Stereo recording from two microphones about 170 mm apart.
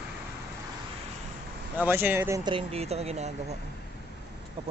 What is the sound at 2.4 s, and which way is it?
Speech, 35° right (ahead or behind).